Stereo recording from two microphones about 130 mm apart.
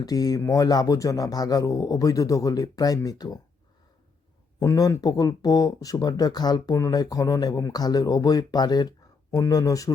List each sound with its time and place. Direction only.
0.0 s speech: 30° left (ahead or behind)
4.6 s speech: 25° left (ahead or behind)